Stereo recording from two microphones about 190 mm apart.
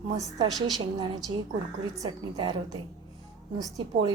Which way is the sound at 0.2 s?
20° right (ahead or behind).